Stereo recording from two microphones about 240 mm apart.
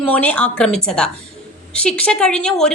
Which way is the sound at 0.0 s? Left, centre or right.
Centre.